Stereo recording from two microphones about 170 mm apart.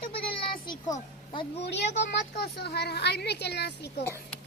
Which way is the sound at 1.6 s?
90° left.